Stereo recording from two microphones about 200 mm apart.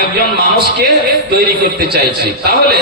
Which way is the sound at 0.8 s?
55° right (ahead or behind).